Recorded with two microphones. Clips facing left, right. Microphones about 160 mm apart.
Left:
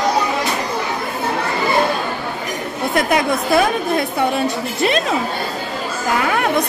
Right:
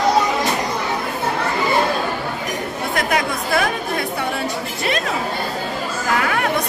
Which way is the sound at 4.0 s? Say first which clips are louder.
Left 5 dB; 25° left (ahead or behind).